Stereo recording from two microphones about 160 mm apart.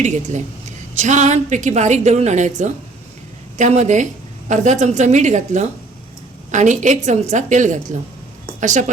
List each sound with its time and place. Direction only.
0.0 s a woman's voice: 45° right (ahead or behind)